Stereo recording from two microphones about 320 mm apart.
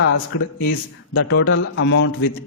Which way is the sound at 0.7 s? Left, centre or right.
Left.